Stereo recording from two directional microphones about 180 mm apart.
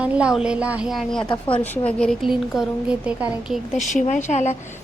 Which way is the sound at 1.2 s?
30° left (ahead or behind).